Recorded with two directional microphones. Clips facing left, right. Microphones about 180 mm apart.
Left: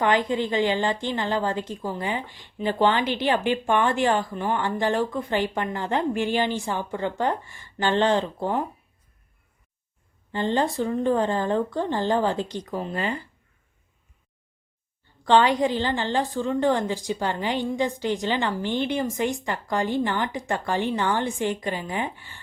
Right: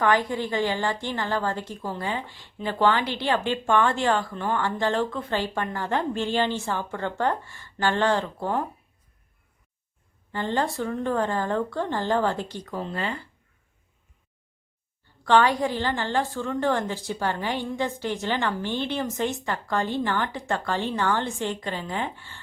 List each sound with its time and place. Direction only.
0.0 s a woman's voice: 20° left (ahead or behind)
10.3 s a woman's voice: 20° left (ahead or behind)
15.2 s a woman's voice: 20° left (ahead or behind)